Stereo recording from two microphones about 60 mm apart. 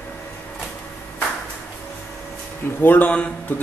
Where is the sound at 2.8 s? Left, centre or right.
Left.